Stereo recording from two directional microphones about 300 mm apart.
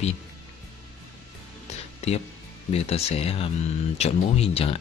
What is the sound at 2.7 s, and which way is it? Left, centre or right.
Speech, left.